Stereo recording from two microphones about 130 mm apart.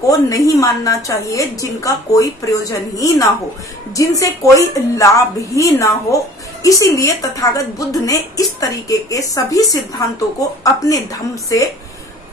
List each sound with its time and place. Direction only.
0.0 s a woman's voice: 25° left (ahead or behind)